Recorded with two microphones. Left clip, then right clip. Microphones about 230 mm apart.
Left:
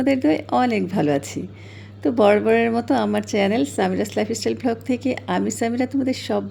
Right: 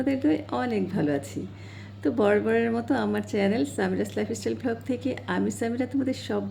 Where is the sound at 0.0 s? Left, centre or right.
Left.